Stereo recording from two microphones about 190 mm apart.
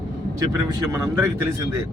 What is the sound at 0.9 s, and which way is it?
Speech, 15° right (ahead or behind).